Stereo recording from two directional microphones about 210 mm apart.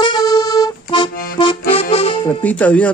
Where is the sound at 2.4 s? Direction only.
5° left (ahead or behind).